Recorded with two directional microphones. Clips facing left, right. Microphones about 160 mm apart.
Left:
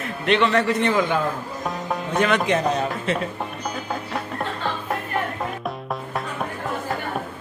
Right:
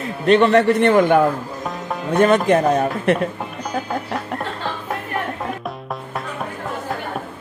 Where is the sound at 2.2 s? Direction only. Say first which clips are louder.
Right 6 dB; 45° right (ahead or behind).